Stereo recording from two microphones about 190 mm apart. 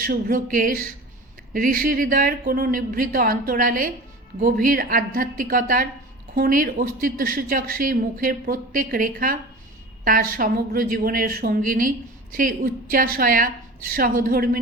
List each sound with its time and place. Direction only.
0.0 s a woman's voice: 45° right (ahead or behind)